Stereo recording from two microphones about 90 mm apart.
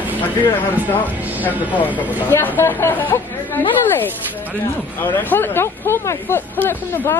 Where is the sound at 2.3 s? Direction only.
25° left (ahead or behind).